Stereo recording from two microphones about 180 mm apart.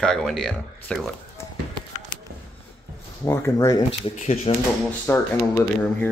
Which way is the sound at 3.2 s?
15° left (ahead or behind).